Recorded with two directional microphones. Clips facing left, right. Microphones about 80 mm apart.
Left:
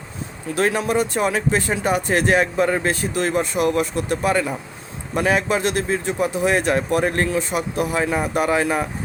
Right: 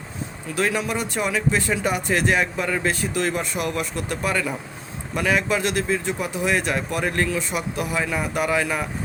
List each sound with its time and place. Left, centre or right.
0.5 s speech: left